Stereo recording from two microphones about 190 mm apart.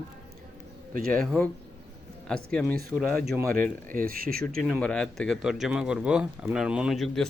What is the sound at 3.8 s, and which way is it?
Speech, 45° right (ahead or behind).